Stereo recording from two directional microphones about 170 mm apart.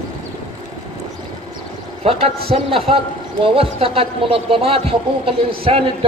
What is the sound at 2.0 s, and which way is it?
A man's voice, 35° right (ahead or behind).